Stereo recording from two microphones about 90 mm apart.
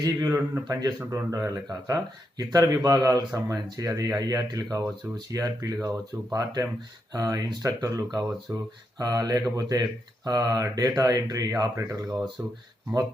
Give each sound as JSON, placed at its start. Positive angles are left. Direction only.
{"t": 0.0, "sound": "speech", "side_deg": -35}